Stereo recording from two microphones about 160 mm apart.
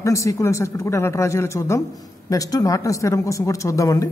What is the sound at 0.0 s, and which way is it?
Speech, 20° left (ahead or behind).